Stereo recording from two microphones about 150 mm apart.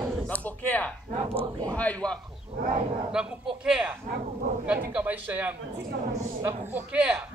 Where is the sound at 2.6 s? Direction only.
65° right (ahead or behind).